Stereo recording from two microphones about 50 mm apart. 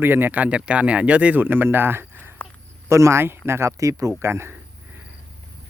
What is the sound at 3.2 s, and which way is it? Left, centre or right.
Speech, right.